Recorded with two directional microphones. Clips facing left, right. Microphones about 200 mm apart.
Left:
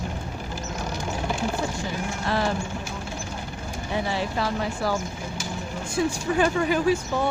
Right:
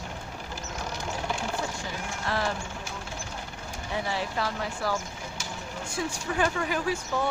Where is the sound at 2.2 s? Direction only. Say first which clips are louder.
Left 4 dB; 25° left (ahead or behind).